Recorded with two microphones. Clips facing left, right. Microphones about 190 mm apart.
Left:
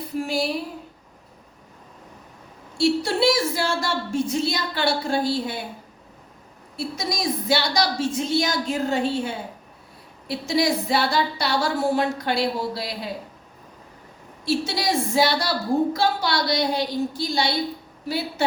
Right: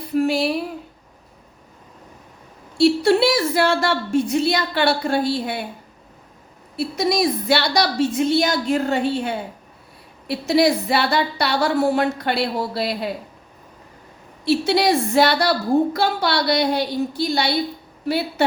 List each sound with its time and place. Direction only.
0.1 s a sound: 60° right (ahead or behind)
2.7 s a woman's voice: 60° right (ahead or behind)
6.7 s a woman's voice: 65° right (ahead or behind)
14.4 s a woman's voice: 65° right (ahead or behind)